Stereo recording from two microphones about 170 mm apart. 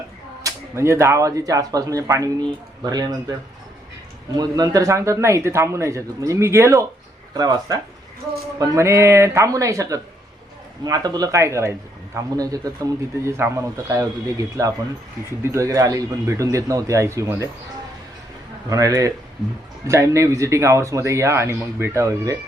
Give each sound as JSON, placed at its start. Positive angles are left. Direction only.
{"t": 0.4, "sound": "speech", "side_deg": -15}
{"t": 4.4, "sound": "speech", "side_deg": -25}
{"t": 18.7, "sound": "speech", "side_deg": -20}